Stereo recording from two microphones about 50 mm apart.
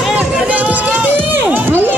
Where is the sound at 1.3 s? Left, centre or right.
Right.